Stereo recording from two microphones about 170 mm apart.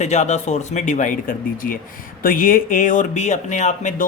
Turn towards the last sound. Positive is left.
turn(degrees=45)  # may be behind; listen again after turning